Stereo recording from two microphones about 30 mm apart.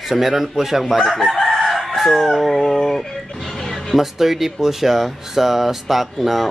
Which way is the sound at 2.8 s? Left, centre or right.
Centre.